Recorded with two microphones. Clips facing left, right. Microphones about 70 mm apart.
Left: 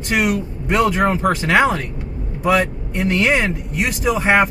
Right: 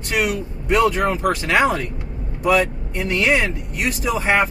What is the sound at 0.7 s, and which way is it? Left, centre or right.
Speech, left.